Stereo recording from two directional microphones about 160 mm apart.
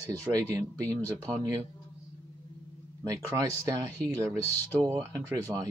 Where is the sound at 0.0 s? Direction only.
20° right (ahead or behind).